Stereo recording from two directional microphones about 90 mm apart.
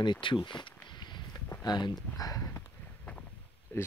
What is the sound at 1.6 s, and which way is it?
Speech, 50° left (ahead or behind).